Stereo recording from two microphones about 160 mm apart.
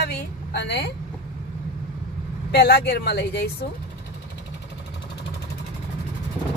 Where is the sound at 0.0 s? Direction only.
90° left.